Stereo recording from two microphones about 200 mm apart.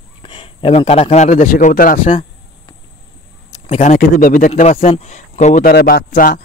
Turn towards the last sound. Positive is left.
turn(degrees=45)  # may be behind; listen again after turning